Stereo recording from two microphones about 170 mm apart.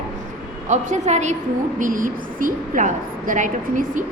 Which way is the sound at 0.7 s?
45° right (ahead or behind).